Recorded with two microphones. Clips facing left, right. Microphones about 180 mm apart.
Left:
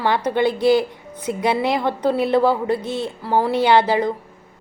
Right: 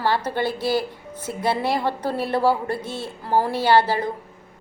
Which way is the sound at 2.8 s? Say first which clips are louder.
Left 6 dB; 10° right (ahead or behind).